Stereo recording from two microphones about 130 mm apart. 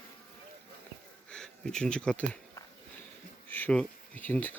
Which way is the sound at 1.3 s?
5° left (ahead or behind).